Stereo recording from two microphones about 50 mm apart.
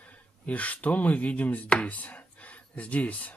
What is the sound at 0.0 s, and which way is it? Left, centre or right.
Speech, left.